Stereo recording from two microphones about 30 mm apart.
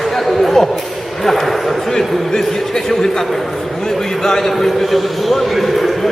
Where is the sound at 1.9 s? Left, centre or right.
Centre.